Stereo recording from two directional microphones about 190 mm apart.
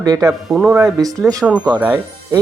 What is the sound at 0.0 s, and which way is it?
Speech, 20° right (ahead or behind).